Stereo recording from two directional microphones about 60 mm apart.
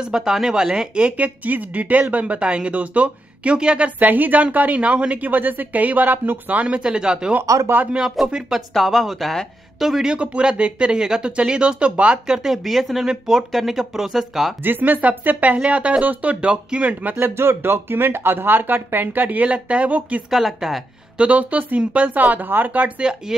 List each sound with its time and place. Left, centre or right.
0.0 s speech: centre
4.0 s speech: right
6.6 s speech: centre
7.5 s speech: right
8.3 s speech: centre
10.1 s speech: centre
14.6 s speech: right
17.2 s speech: right
20.2 s speech: centre
21.2 s speech: right